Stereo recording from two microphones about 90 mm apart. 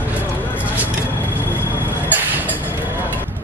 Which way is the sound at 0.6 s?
20° right (ahead or behind).